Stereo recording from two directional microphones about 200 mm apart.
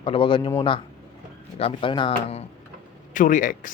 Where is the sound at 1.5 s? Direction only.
25° left (ahead or behind).